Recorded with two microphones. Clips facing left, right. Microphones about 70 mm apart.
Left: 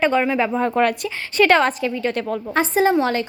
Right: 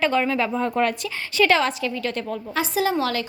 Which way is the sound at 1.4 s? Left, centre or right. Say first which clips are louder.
Left 4 dB; left.